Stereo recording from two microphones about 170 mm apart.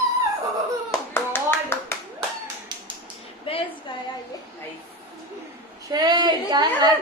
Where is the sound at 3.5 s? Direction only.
30° left (ahead or behind).